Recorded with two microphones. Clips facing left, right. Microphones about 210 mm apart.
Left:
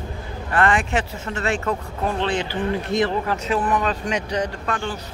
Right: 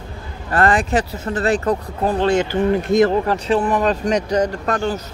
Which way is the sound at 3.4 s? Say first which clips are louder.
Right 4 dB; 30° right (ahead or behind).